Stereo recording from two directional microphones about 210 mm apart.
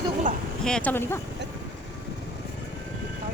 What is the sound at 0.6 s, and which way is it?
Speech, 5° left (ahead or behind).